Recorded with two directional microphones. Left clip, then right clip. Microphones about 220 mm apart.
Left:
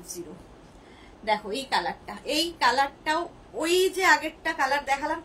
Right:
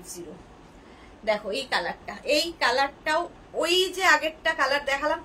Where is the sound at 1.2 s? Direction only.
15° right (ahead or behind).